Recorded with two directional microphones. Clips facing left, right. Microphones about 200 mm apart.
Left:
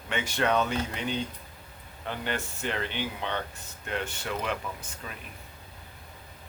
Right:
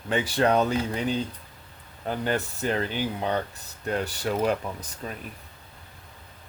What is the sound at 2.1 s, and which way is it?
Speech, 40° right (ahead or behind).